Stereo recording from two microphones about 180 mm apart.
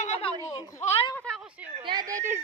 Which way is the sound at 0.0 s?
35° left (ahead or behind).